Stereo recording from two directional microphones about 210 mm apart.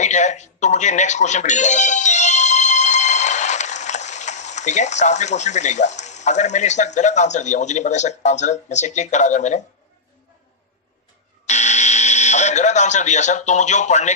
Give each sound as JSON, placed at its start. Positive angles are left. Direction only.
{"t": 0.0, "sound": "speech", "side_deg": 35}
{"t": 11.4, "sound": "speech", "side_deg": 35}